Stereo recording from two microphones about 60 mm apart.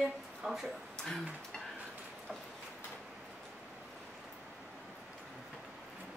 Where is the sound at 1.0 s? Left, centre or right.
Centre.